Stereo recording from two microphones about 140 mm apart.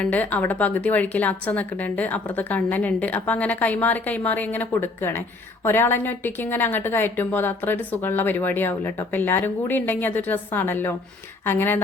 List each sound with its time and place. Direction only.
0.0 s a woman's voice: 10° left (ahead or behind)